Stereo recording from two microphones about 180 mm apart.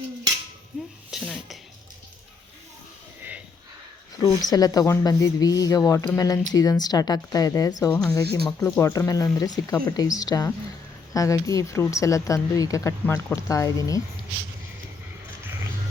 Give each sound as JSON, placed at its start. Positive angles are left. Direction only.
{"t": 1.1, "sound": "a sound", "side_deg": 0}
{"t": 4.2, "sound": "speech", "side_deg": 20}
{"t": 7.9, "sound": "speech", "side_deg": 5}
{"t": 8.6, "sound": "speech", "side_deg": 15}